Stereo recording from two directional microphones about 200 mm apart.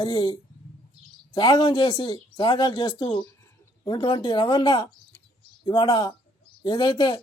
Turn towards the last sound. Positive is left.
turn(degrees=25)  # may be behind; listen again after turning